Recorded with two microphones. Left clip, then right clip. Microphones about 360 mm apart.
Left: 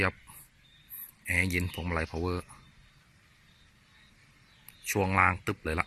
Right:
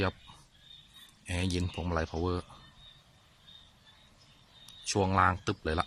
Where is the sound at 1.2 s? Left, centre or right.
Centre.